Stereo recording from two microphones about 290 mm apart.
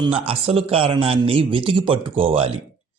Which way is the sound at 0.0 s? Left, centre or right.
Centre.